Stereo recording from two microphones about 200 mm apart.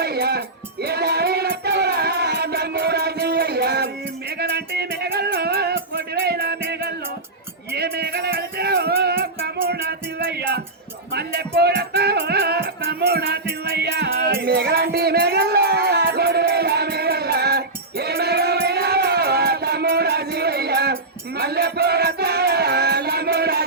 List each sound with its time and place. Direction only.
0.0 s music: 50° right (ahead or behind)